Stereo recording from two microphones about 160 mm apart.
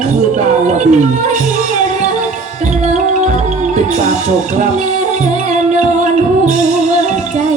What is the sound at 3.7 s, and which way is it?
Music, 45° right (ahead or behind).